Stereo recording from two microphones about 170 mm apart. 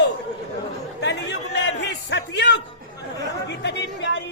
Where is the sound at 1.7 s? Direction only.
90° left.